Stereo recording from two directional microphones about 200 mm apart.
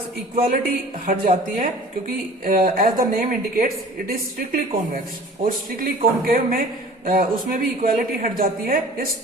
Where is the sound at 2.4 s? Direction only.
45° right (ahead or behind).